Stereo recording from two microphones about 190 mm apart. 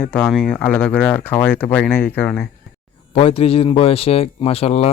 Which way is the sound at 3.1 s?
30° left (ahead or behind).